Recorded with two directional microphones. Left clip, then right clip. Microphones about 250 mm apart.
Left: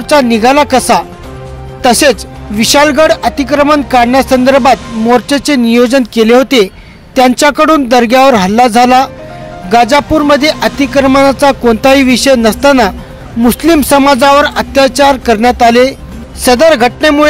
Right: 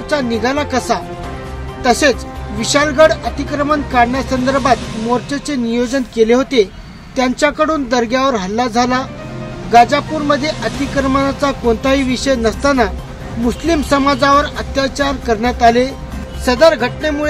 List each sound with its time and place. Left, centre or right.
0.1 s speech: left